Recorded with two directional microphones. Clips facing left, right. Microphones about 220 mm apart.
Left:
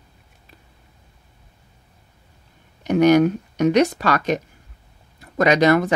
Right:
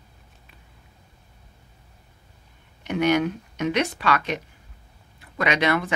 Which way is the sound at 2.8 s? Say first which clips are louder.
Left 7 dB; 40° left (ahead or behind).